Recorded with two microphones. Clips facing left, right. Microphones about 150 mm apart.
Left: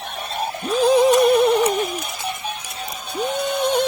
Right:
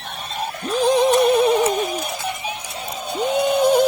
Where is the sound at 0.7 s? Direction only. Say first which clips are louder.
Left 2 dB; centre (ahead or behind).